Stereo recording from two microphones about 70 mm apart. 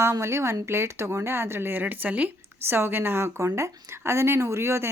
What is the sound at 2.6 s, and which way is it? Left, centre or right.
Speech, right.